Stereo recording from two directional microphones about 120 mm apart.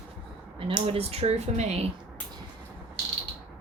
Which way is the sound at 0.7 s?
50° right (ahead or behind).